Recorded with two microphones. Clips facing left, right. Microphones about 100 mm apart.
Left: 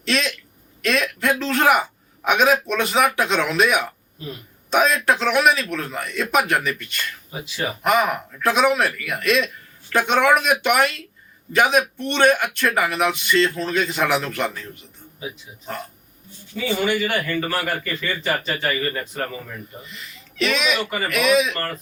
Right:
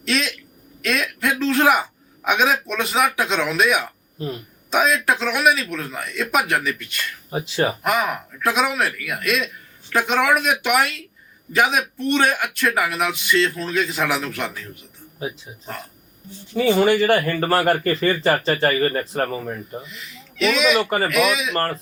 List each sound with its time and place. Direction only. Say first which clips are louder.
0.0 s speech: even; centre (ahead or behind)
7.4 s speech: right 6 dB; 40° right (ahead or behind)
7.8 s speech: left 2 dB; centre (ahead or behind)
16.8 s speech: right 3 dB; 35° right (ahead or behind)
19.8 s speech: right 1 dB; centre (ahead or behind)